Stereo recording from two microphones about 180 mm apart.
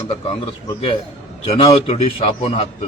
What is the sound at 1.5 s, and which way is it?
A man's voice, 30° left (ahead or behind).